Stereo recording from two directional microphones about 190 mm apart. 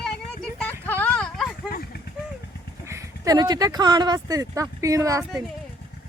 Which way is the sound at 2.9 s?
15° right (ahead or behind).